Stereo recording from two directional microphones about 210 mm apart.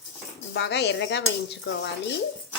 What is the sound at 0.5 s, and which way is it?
Speech, 55° left (ahead or behind).